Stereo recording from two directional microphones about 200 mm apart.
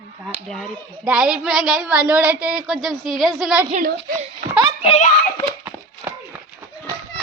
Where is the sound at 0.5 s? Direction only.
Centre (ahead or behind).